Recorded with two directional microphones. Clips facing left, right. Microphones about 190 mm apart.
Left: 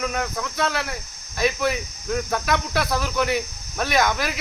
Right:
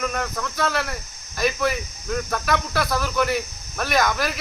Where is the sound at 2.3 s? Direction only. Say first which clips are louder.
Even; 20° left (ahead or behind).